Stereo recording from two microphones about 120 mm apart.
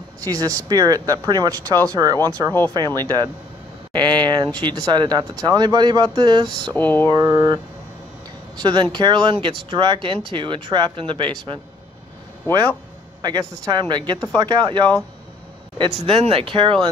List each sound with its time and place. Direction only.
0.2 s speech: 30° right (ahead or behind)
6.7 s a sound: 15° left (ahead or behind)
7.1 s speech: 35° right (ahead or behind)
13.2 s speech: 35° right (ahead or behind)